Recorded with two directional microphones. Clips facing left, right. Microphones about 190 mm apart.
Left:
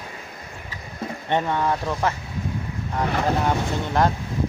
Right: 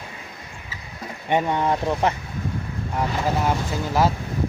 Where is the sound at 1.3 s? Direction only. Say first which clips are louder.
Right 2 dB; 15° right (ahead or behind).